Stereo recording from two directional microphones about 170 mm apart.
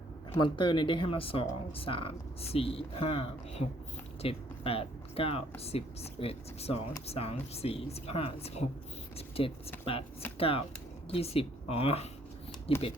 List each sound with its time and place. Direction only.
0.3 s speech: 30° left (ahead or behind)